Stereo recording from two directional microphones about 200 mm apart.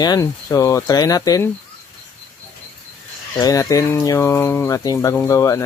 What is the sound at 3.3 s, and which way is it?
Speech, 15° left (ahead or behind).